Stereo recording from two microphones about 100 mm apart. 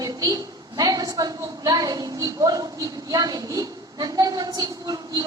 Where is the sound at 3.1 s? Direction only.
40° right (ahead or behind).